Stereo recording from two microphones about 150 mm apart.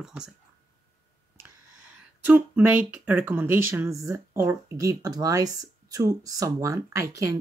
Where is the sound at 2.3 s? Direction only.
10° right (ahead or behind).